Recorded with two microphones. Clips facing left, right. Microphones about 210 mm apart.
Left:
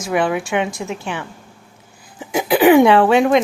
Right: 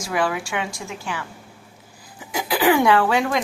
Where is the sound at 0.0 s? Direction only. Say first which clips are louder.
Left 5 dB; 20° left (ahead or behind).